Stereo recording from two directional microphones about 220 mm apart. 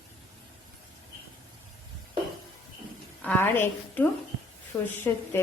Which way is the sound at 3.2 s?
10° left (ahead or behind).